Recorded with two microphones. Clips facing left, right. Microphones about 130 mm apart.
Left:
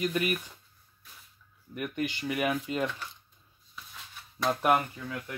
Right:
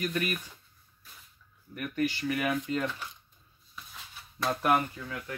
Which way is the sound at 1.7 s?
20° left (ahead or behind).